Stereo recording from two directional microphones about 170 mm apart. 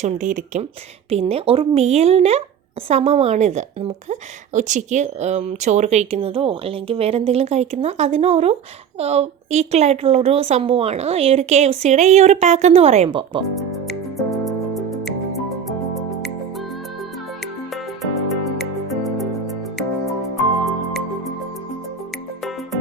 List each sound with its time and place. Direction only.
0.0 s speech: 45° right (ahead or behind)
1.1 s a woman's voice: 35° right (ahead or behind)
13.1 s speech: 30° right (ahead or behind)
14.3 s music: centre (ahead or behind)
17.4 s music: centre (ahead or behind)